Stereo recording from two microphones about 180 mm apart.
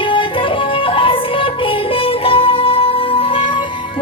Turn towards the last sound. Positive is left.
turn(degrees=30)  # may be behind; listen again after turning